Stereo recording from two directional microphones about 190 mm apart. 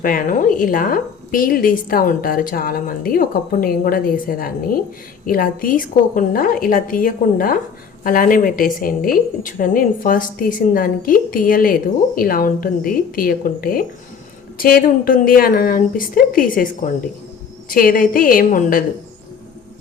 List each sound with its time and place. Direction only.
0.0 s a woman's voice: 45° left (ahead or behind)